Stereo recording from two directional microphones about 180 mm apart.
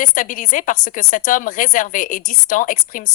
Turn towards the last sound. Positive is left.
turn(degrees=50)  # may be behind; listen again after turning